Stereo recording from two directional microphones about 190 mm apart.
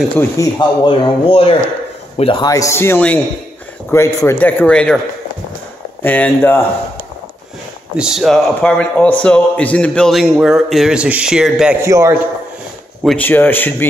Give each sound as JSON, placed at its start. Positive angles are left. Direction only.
{"t": 0.2, "sound": "speech", "side_deg": 20}
{"t": 6.0, "sound": "speech", "side_deg": 10}
{"t": 7.9, "sound": "a man's voice", "side_deg": -5}
{"t": 11.8, "sound": "a man's voice", "side_deg": -15}
{"t": 13.0, "sound": "speech", "side_deg": 5}